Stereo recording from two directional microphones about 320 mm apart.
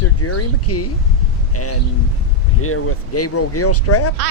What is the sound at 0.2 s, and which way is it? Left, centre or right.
Speech, left.